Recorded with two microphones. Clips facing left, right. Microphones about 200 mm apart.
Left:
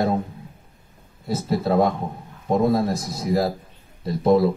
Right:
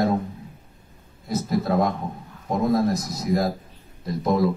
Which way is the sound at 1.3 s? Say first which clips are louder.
Left 1 dB; 30° left (ahead or behind).